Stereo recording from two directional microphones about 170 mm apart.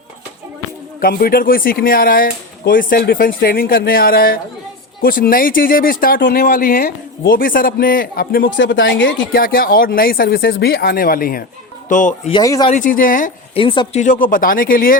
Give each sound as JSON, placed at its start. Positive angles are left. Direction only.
{"t": 1.0, "sound": "speech", "side_deg": 60}
{"t": 11.9, "sound": "speech", "side_deg": 50}
{"t": 12.3, "sound": "speech", "side_deg": 20}
{"t": 12.6, "sound": "speech", "side_deg": 45}
{"t": 13.5, "sound": "speech", "side_deg": 30}
{"t": 14.0, "sound": "speech", "side_deg": 50}